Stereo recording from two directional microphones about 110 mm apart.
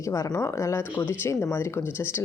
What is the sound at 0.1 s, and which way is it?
A woman's voice, 25° left (ahead or behind).